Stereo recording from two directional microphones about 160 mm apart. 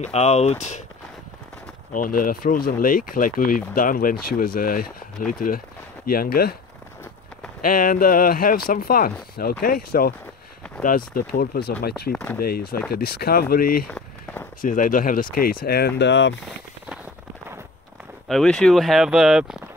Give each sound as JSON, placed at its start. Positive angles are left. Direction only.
{"t": 0.1, "sound": "speech", "side_deg": 40}
{"t": 1.9, "sound": "speech", "side_deg": 60}
{"t": 7.6, "sound": "speech", "side_deg": 60}
{"t": 12.1, "sound": "speech", "side_deg": 10}
{"t": 12.4, "sound": "speech", "side_deg": 70}
{"t": 13.8, "sound": "a sound", "side_deg": 5}
{"t": 14.6, "sound": "speech", "side_deg": 55}
{"t": 18.3, "sound": "speech", "side_deg": 5}